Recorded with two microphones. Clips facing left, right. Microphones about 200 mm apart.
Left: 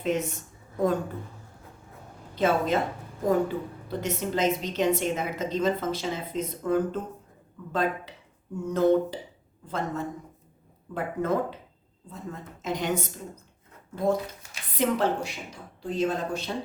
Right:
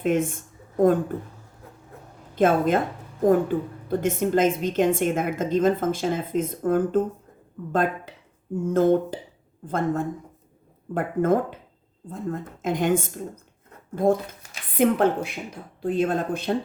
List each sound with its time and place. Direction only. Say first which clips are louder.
0.0 s speech: right 5 dB; 50° right (ahead or behind)
2.3 s a woman's voice: right 4 dB; 50° right (ahead or behind)